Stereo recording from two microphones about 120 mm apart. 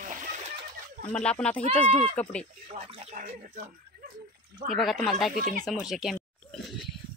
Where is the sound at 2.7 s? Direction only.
90° right.